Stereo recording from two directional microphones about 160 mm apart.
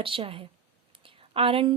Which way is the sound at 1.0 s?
35° right (ahead or behind).